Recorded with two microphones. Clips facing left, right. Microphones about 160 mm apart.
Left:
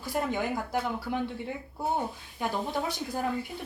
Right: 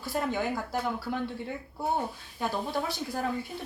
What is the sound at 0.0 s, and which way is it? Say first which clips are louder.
Speech: even; 15° left (ahead or behind).